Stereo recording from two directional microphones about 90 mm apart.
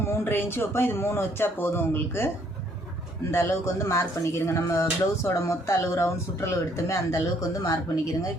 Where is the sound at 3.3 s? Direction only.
30° left (ahead or behind).